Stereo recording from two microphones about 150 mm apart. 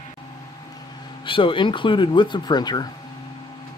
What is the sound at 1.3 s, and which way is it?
Speech, 35° left (ahead or behind).